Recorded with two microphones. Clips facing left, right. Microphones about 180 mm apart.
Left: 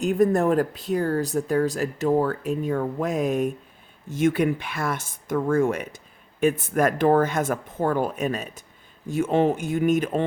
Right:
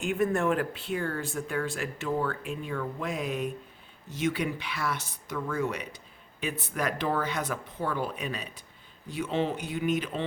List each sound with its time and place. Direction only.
0.0 s speech: 40° left (ahead or behind)